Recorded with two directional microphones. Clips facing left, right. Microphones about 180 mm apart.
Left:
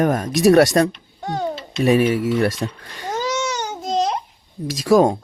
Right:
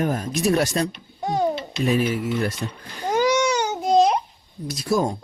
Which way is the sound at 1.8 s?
70° left (ahead or behind).